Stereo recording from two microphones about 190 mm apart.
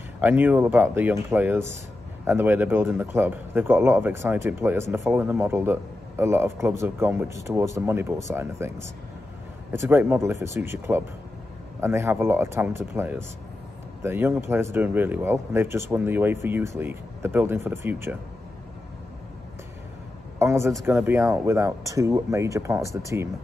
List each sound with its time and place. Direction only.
0.2 s a man's voice: 10° right (ahead or behind)
20.3 s a man's voice: 15° right (ahead or behind)